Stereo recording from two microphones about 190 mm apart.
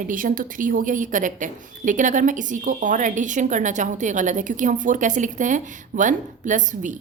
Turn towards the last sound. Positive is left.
turn(degrees=-40)  # may be behind; listen again after turning